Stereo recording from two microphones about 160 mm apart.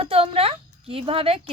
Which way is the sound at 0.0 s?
35° right (ahead or behind).